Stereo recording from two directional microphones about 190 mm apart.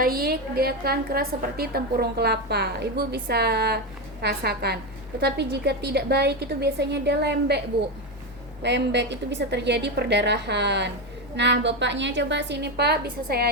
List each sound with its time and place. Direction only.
0.0 s a woman's voice: 50° right (ahead or behind)
8.6 s a woman's voice: 65° right (ahead or behind)